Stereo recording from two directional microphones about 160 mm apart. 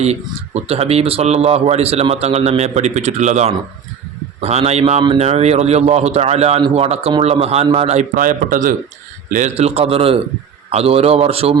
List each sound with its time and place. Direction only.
0.0 s a man's voice: 40° right (ahead or behind)